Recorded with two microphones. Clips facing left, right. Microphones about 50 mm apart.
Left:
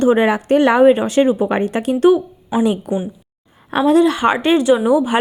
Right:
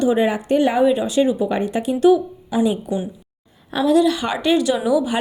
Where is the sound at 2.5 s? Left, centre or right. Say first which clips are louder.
Left 2 dB; left.